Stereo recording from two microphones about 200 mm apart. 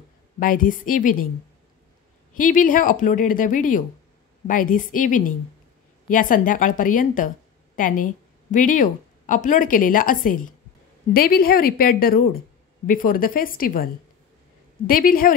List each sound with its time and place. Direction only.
0.4 s a woman's voice: 45° left (ahead or behind)
2.3 s a woman's voice: 40° left (ahead or behind)
14.9 s a woman's voice: 45° left (ahead or behind)